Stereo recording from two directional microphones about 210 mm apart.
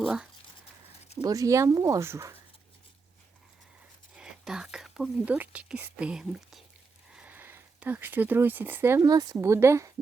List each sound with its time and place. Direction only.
0.0 s speech: centre (ahead or behind)
1.2 s speech: 15° right (ahead or behind)
4.1 s speech: 5° right (ahead or behind)